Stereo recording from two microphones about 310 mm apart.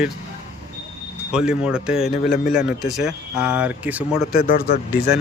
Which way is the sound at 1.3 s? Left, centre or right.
Centre.